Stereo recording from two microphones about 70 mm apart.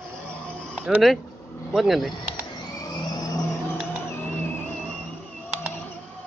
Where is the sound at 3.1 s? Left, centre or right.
Left.